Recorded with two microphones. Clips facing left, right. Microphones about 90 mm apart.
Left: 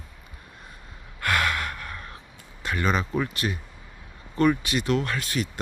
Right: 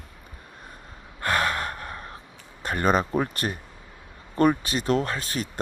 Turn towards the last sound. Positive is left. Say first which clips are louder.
# even
turn(degrees=-40)  # may be behind; listen again after turning